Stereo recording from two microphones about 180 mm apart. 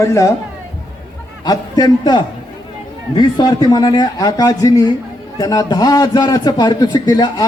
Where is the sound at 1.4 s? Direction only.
20° left (ahead or behind).